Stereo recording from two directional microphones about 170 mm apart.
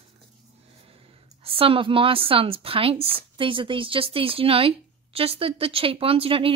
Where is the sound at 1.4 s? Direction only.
35° right (ahead or behind).